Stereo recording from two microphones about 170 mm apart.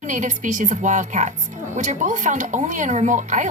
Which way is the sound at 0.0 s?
45° right (ahead or behind).